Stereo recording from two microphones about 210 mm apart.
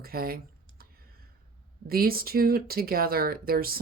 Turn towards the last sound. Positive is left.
turn(degrees=-45)  # may be behind; listen again after turning